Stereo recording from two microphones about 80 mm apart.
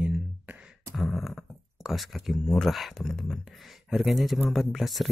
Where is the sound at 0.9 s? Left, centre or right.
Centre.